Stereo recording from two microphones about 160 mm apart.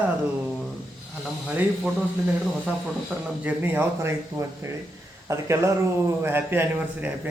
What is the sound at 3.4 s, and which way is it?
Speech, 15° right (ahead or behind).